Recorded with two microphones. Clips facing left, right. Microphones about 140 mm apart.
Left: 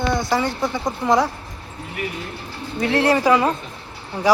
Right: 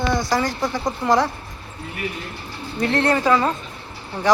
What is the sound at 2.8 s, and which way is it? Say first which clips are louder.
Speech: left 2 dB; 5° left (ahead or behind).